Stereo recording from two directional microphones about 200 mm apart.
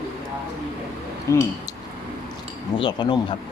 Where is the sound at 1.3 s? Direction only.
15° left (ahead or behind).